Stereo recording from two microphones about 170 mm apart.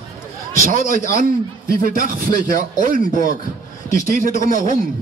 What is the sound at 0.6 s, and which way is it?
Speech, 55° right (ahead or behind).